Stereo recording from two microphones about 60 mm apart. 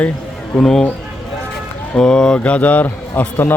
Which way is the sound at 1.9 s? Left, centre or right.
Centre.